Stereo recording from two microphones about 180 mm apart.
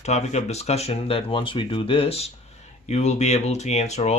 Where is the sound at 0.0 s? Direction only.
40° left (ahead or behind).